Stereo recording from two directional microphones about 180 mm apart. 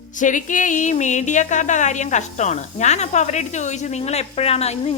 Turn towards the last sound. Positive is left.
turn(degrees=35)  # may be behind; listen again after turning